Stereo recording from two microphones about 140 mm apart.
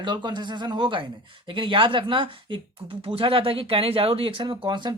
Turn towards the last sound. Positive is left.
turn(degrees=-35)  # may be behind; listen again after turning